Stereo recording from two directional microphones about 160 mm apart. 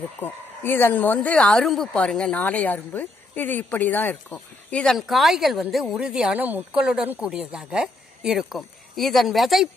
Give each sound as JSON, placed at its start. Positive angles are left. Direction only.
{"t": 0.2, "sound": "speech", "side_deg": 15}